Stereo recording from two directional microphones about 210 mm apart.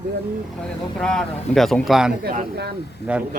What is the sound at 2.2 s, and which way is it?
Speech, 45° right (ahead or behind).